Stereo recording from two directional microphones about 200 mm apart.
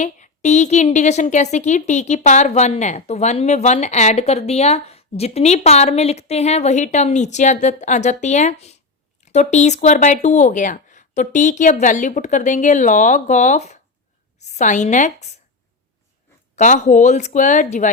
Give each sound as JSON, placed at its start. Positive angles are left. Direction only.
{"t": 0.0, "sound": "a woman's voice", "side_deg": 35}
{"t": 16.6, "sound": "a woman's voice", "side_deg": 35}